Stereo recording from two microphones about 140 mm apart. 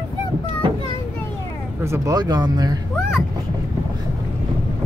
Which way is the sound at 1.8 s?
20° right (ahead or behind).